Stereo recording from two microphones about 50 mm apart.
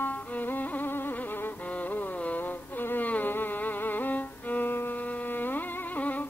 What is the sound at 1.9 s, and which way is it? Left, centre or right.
Insect, left.